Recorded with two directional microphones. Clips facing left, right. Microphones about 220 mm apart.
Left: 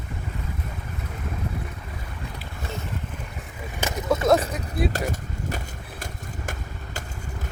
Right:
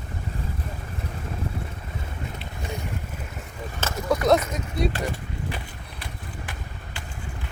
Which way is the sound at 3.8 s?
15° left (ahead or behind).